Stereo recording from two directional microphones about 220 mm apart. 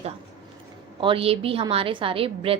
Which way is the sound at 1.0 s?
25° right (ahead or behind).